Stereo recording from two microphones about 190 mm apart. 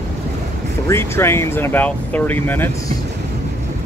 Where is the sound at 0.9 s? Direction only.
15° left (ahead or behind).